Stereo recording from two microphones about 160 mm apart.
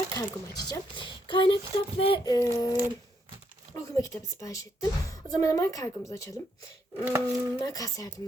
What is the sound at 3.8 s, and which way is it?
Speech, 20° left (ahead or behind).